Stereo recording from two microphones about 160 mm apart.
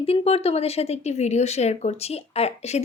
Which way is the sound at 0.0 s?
40° left (ahead or behind).